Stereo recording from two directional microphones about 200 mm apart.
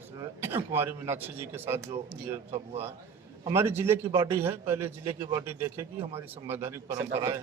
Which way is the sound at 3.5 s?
10° right (ahead or behind).